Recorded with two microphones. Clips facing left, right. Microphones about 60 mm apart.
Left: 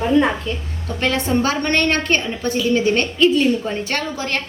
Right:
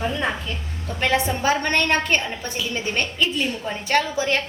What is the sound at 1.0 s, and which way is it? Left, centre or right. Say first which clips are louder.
A woman's voice: left 2 dB; centre.